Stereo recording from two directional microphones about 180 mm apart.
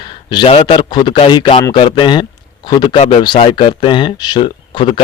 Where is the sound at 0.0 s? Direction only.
25° left (ahead or behind).